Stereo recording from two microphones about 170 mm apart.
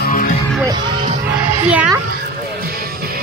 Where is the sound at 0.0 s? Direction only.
55° left (ahead or behind).